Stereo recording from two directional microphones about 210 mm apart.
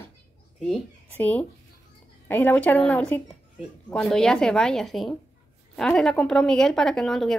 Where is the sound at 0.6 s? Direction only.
5° left (ahead or behind).